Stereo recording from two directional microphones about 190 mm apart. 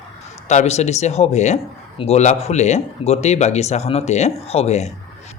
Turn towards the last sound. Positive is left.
turn(degrees=35)  # may be behind; listen again after turning